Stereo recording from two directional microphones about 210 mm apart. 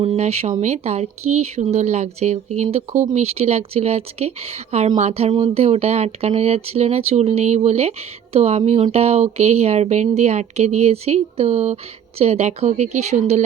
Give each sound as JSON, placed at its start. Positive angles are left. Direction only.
{"t": 0.0, "sound": "speech", "side_deg": -30}